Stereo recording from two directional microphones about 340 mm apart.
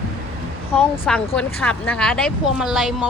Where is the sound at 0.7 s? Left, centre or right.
Centre.